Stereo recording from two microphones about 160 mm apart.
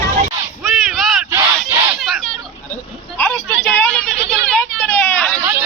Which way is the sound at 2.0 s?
Centre (ahead or behind).